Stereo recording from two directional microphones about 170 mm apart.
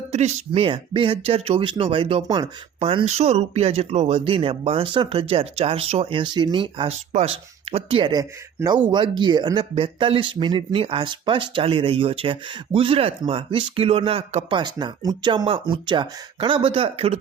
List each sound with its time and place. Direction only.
0.1 s speech: 35° right (ahead or behind)